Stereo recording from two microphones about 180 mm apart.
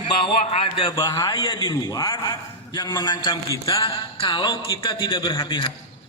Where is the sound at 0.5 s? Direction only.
25° left (ahead or behind).